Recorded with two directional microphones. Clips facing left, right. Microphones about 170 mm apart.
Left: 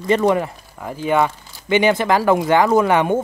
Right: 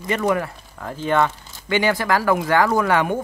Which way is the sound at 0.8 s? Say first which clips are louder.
Left 2 dB; 10° left (ahead or behind).